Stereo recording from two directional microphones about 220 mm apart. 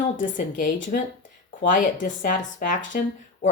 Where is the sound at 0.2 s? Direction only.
35° left (ahead or behind).